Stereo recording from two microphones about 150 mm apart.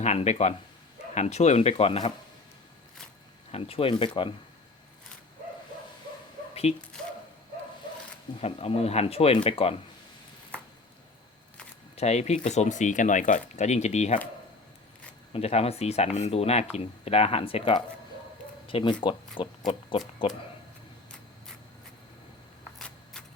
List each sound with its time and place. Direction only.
0.0 s speech: 50° left (ahead or behind)
3.5 s speech: 40° left (ahead or behind)
6.5 s a sound: 45° left (ahead or behind)
8.4 s speech: 45° left (ahead or behind)
11.9 s speech: 45° left (ahead or behind)
15.3 s speech: 45° left (ahead or behind)
19.4 s oink: 35° left (ahead or behind)
20.2 s speech: 35° left (ahead or behind)